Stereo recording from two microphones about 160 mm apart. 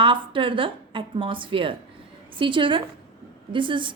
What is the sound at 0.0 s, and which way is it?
A woman's voice, 30° right (ahead or behind).